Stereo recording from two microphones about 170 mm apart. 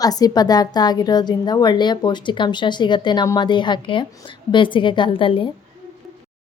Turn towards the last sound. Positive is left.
turn(degrees=30)  # may be behind; listen again after turning